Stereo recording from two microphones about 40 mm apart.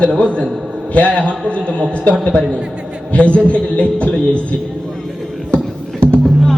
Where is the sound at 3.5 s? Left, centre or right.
Left.